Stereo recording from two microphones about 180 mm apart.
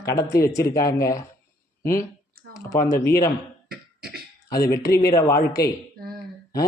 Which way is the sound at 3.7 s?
60° right (ahead or behind).